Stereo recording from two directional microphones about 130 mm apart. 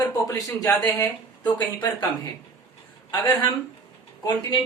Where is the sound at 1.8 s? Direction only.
30° left (ahead or behind).